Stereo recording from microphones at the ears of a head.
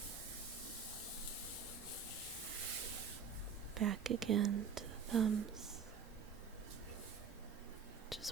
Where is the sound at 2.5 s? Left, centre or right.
Right.